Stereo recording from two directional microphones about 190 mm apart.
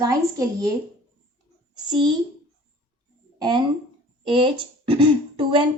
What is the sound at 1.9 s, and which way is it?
Speech, 25° right (ahead or behind).